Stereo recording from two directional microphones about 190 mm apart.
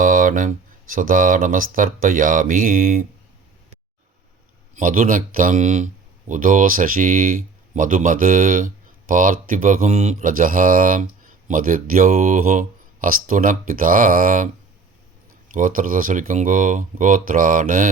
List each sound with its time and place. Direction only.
0.0 s speech: 45° right (ahead or behind)
4.7 s speech: 45° right (ahead or behind)
15.5 s speech: 45° right (ahead or behind)